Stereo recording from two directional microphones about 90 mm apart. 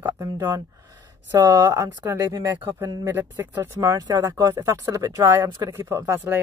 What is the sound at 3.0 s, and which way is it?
Speech, 25° right (ahead or behind).